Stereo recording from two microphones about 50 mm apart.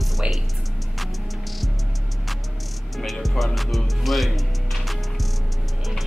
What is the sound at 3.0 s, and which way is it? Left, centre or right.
Music, centre.